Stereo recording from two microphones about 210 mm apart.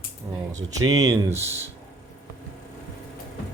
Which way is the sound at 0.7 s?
15° right (ahead or behind).